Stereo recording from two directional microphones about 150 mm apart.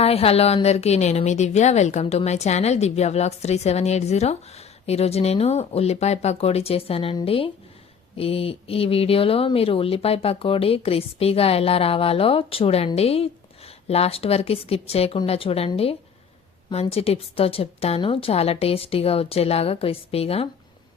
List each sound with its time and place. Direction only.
0.0 s a woman's voice: 40° left (ahead or behind)